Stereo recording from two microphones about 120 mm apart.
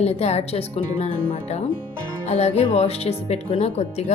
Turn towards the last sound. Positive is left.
turn(degrees=65)  # may be behind; listen again after turning